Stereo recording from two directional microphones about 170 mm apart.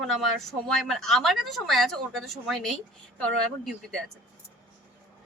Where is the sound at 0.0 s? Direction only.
Centre (ahead or behind).